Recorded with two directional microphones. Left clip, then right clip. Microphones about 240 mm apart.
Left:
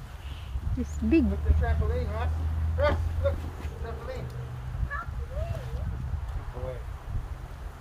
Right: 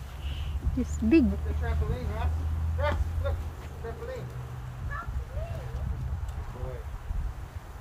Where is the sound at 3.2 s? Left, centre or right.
Centre.